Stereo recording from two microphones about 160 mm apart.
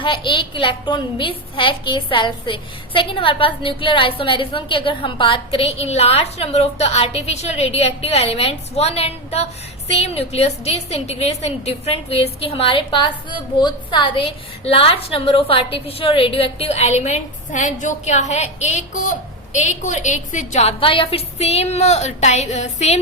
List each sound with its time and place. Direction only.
0.0 s a woman's voice: 30° left (ahead or behind)